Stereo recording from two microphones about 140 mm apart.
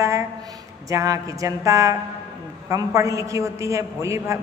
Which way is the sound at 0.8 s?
25° right (ahead or behind).